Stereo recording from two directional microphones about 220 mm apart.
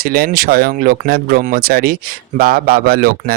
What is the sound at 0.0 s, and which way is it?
Speech, 40° right (ahead or behind).